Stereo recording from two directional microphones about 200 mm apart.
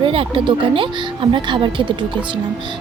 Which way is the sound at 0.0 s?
25° right (ahead or behind).